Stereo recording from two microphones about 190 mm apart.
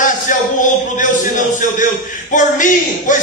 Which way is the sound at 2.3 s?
40° left (ahead or behind).